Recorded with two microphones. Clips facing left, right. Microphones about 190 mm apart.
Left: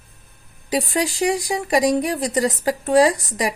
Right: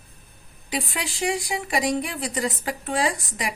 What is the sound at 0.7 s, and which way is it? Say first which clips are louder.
Speech: left 8 dB; 40° left (ahead or behind).